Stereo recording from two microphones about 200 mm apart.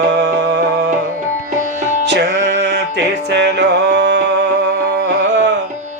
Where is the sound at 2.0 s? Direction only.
55° right (ahead or behind).